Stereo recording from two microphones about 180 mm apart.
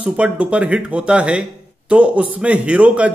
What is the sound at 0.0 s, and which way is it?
A man's voice, 5° right (ahead or behind).